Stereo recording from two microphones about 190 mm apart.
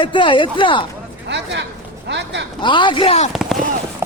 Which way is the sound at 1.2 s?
65° right (ahead or behind).